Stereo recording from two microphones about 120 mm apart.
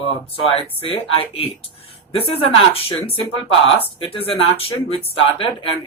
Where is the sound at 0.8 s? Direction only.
50° left (ahead or behind).